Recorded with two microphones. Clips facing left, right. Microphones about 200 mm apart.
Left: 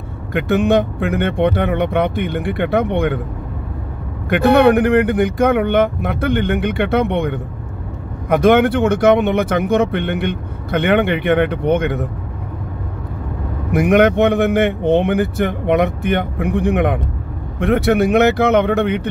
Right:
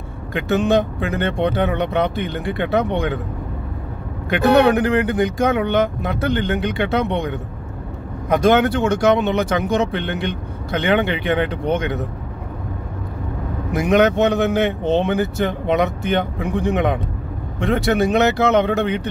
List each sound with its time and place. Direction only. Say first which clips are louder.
0.3 s speech: left 3 dB; 60° left (ahead or behind)
4.3 s speech: left 3 dB; 60° left (ahead or behind)
13.7 s speech: left 3 dB; 60° left (ahead or behind)
14.7 s speech: left 3 dB; 15° left (ahead or behind)
15.0 s speech: left 2 dB; 55° left (ahead or behind)